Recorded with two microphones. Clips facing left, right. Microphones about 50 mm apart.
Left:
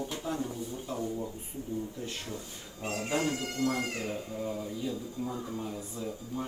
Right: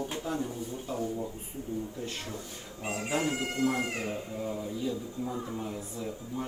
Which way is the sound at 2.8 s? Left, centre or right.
Centre.